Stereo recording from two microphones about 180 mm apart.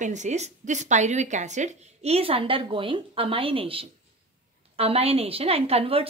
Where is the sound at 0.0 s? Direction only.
40° right (ahead or behind).